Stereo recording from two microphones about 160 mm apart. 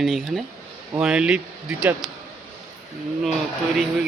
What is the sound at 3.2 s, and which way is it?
Speech, centre (ahead or behind).